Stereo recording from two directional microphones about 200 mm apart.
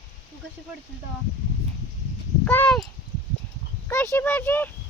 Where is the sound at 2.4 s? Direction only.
5° left (ahead or behind).